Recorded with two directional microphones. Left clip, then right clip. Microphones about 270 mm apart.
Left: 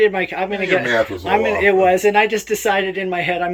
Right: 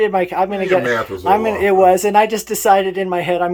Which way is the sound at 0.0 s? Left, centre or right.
Centre.